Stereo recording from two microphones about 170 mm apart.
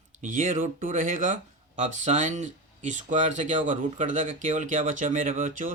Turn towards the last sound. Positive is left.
turn(degrees=-50)  # may be behind; listen again after turning